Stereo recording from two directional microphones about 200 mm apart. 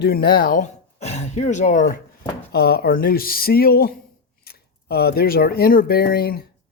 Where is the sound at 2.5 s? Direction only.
50° left (ahead or behind).